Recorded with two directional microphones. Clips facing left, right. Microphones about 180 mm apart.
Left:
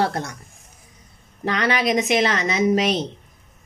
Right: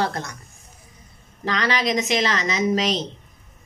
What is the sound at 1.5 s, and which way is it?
A woman's voice, 55° left (ahead or behind).